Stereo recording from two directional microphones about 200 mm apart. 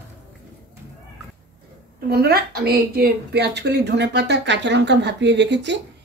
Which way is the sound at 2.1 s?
50° right (ahead or behind).